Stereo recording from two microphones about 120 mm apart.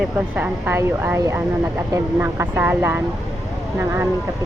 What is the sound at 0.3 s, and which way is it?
A woman's voice, 15° right (ahead or behind).